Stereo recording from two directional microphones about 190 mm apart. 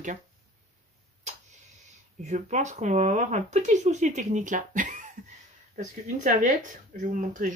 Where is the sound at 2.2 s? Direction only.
35° right (ahead or behind).